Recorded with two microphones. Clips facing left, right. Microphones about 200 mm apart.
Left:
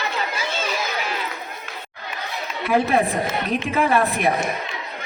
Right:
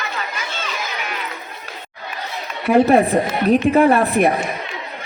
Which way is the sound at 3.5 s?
40° right (ahead or behind).